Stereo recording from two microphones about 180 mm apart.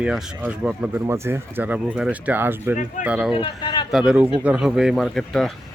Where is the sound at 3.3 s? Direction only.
25° left (ahead or behind).